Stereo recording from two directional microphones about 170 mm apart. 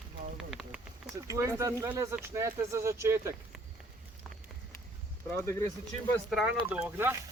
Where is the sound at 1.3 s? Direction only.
15° right (ahead or behind).